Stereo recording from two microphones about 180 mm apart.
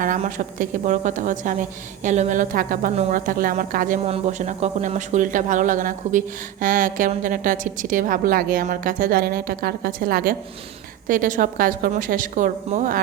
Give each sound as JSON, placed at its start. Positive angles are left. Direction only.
{"t": 0.0, "sound": "speech", "side_deg": -45}